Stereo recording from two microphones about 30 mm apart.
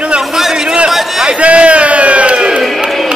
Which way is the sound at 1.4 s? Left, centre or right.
Right.